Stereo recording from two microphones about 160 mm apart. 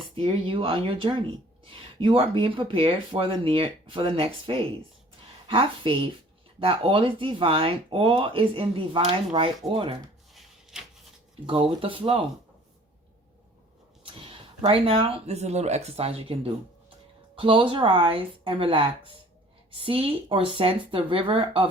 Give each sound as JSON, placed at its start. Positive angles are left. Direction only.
{"t": 0.2, "sound": "speech", "side_deg": -35}
{"t": 10.3, "sound": "a sound", "side_deg": 0}
{"t": 11.4, "sound": "speech", "side_deg": -35}
{"t": 14.0, "sound": "speech", "side_deg": -35}